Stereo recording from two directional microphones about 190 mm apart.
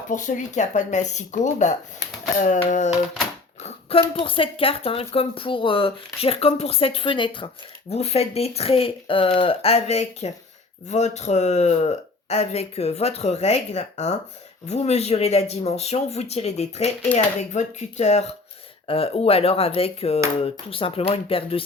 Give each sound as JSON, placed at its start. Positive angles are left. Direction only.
{"t": 0.1, "sound": "speech", "side_deg": 40}
{"t": 3.6, "sound": "a sound", "side_deg": 30}
{"t": 4.1, "sound": "speech", "side_deg": 30}